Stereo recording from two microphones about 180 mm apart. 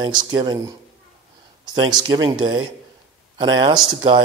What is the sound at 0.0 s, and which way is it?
Speech, 25° right (ahead or behind).